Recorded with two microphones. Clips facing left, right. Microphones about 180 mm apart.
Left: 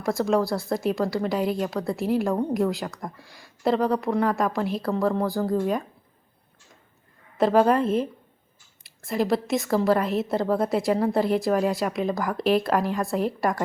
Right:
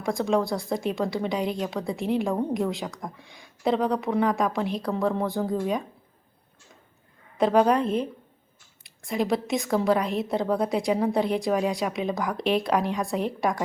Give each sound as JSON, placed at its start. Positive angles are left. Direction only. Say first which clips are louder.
{"t": 0.0, "sound": "speech", "louder": "left 2 dB", "side_deg": 5}
{"t": 7.3, "sound": "speech", "louder": "left 1 dB", "side_deg": 0}